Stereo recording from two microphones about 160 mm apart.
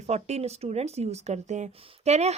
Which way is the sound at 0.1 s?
40° right (ahead or behind).